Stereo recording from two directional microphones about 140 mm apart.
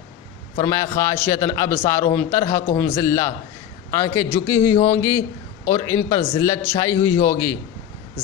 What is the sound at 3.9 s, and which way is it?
A man's voice, 30° left (ahead or behind).